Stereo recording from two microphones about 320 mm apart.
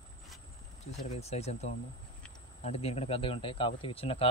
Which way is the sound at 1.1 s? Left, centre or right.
Centre.